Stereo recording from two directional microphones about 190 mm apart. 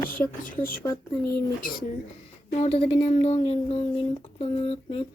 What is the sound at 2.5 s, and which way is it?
Speech, 35° left (ahead or behind).